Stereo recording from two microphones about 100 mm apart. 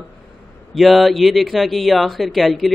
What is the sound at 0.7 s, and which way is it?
Speech, centre (ahead or behind).